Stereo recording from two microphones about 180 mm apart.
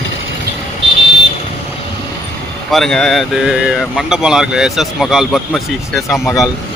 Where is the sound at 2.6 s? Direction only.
Centre (ahead or behind).